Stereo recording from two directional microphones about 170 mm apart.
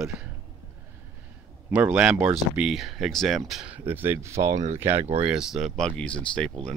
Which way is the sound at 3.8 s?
10° right (ahead or behind).